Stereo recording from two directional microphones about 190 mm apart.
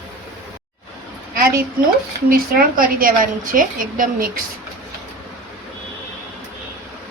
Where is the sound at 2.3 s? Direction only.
50° right (ahead or behind).